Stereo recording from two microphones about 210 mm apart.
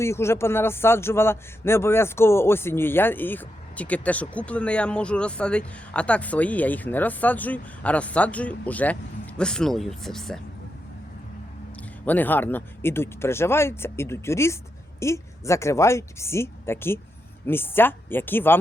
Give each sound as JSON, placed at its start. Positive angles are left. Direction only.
{"t": 0.0, "sound": "a man's voice", "side_deg": 10}
{"t": 11.8, "sound": "a man's voice", "side_deg": 10}